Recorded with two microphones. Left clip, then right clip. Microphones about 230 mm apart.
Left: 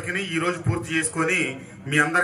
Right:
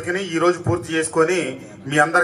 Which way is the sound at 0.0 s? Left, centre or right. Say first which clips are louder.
Right 6 dB; right.